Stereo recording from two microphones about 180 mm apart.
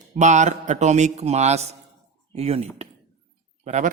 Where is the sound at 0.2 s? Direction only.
40° right (ahead or behind).